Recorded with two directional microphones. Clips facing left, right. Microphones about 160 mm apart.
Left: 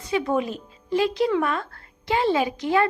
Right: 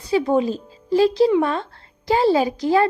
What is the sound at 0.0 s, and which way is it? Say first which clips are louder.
Speech: right 5 dB; 35° right (ahead or behind).